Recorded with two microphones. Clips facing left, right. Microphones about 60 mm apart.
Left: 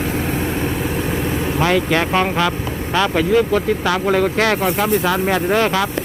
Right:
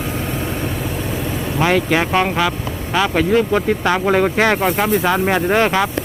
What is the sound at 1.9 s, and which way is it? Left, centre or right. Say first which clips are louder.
Speech: right 1 dB; centre.